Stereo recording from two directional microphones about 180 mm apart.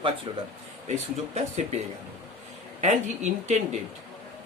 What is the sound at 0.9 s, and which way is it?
Speech, 40° right (ahead or behind).